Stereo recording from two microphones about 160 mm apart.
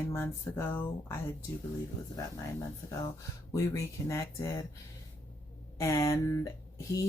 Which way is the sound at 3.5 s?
20° left (ahead or behind).